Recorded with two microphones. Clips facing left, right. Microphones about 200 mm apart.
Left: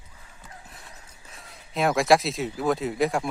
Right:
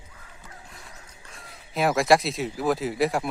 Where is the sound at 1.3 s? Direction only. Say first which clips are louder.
Even; centre (ahead or behind).